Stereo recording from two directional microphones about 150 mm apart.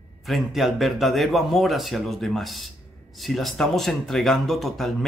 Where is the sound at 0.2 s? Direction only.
Centre (ahead or behind).